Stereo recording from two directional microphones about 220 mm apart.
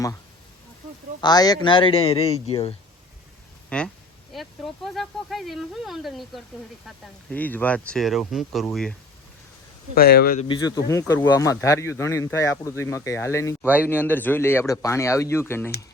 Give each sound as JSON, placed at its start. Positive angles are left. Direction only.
{"t": 1.2, "sound": "a man's voice", "side_deg": 20}
{"t": 3.7, "sound": "speech", "side_deg": 5}
{"t": 9.9, "sound": "speech", "side_deg": 45}
{"t": 10.5, "sound": "speech", "side_deg": 15}